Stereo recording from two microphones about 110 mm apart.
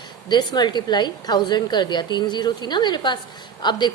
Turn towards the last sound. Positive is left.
turn(degrees=40)  # may be behind; listen again after turning